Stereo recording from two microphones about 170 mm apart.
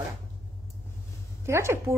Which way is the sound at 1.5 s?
15° right (ahead or behind).